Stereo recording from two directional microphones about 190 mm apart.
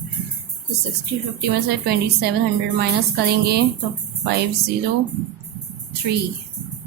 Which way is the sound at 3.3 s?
60° right (ahead or behind).